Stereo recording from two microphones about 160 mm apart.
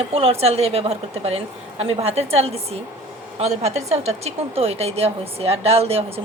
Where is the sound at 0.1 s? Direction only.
35° right (ahead or behind).